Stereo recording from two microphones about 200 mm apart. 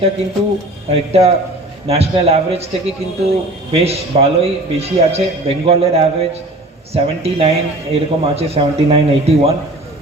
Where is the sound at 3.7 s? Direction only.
30° right (ahead or behind).